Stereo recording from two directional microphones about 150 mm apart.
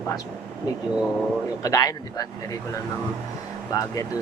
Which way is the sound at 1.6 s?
25° left (ahead or behind).